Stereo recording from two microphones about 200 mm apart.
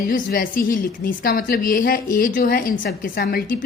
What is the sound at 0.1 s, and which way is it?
A woman's voice, 45° left (ahead or behind).